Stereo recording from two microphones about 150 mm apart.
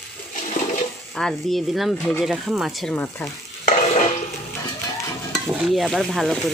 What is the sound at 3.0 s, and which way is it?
Speech, 15° left (ahead or behind).